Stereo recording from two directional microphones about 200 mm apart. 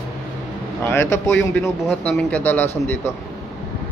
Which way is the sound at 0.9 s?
10° left (ahead or behind).